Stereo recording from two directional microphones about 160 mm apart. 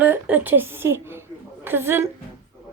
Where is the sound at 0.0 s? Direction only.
10° right (ahead or behind).